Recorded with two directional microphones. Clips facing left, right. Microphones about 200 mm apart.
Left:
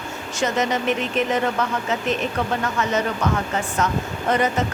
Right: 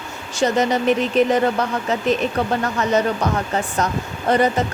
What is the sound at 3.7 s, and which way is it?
Speech, 35° right (ahead or behind).